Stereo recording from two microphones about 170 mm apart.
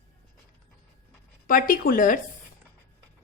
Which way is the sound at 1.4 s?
55° left (ahead or behind).